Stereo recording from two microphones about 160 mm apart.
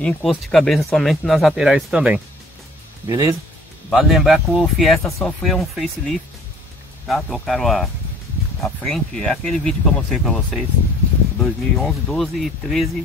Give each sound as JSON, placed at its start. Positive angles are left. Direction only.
{"t": 0.0, "sound": "speech", "side_deg": 0}
{"t": 3.1, "sound": "speech", "side_deg": -20}
{"t": 3.9, "sound": "speech", "side_deg": 0}